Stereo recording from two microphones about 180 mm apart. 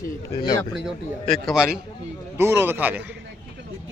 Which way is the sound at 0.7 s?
Centre (ahead or behind).